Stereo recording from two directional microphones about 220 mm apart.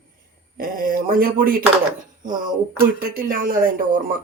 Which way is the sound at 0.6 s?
40° right (ahead or behind).